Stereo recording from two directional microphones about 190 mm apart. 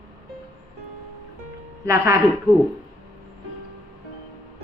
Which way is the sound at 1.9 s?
15° right (ahead or behind).